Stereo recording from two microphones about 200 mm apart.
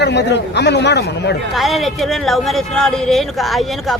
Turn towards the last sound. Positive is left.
turn(degrees=0)  # may be behind; listen again after turning